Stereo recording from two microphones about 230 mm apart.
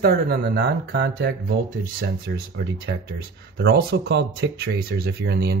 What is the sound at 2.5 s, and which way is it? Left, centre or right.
Speech, right.